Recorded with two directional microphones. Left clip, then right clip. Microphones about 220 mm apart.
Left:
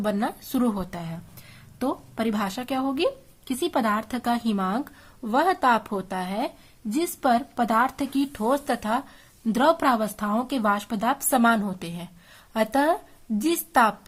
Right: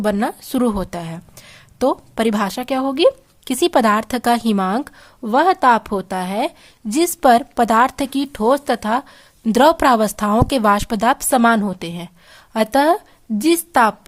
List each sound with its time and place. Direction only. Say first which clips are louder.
0.0 s speech: right 7 dB; 35° right (ahead or behind)